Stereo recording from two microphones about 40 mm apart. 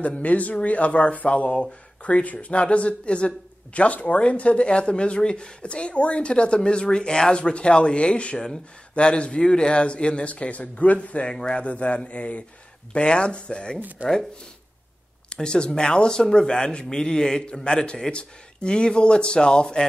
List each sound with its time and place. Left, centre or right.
0.0 s speech: left
11.2 s speech: centre
11.6 s speech: left
13.7 s speech: right
15.2 s speech: left